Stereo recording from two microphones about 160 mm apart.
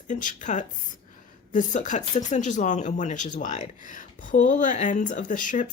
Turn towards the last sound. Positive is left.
turn(degrees=55)  # may be behind; listen again after turning